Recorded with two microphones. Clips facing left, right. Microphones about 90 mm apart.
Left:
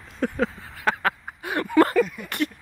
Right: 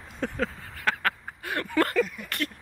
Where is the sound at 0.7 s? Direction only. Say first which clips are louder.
Left 2 dB; 20° left (ahead or behind).